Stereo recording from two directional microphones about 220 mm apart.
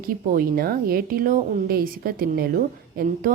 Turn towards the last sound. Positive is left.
turn(degrees=-40)  # may be behind; listen again after turning